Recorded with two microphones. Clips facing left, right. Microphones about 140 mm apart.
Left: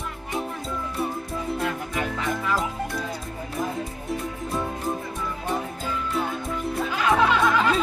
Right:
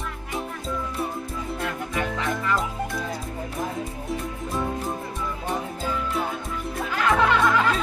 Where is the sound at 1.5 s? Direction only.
Centre (ahead or behind).